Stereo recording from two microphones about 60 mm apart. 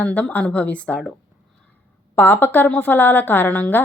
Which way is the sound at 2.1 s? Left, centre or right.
Left.